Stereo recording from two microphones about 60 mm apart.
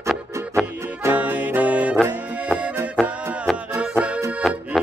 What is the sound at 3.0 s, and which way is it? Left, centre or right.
Music, centre.